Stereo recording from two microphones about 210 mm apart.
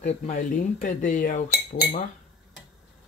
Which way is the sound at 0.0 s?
35° left (ahead or behind).